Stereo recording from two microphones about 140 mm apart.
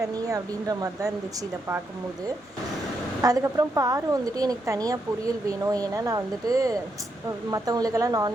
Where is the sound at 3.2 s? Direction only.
25° right (ahead or behind).